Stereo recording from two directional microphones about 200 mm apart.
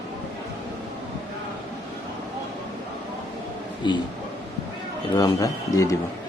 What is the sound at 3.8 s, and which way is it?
Speech, 20° left (ahead or behind).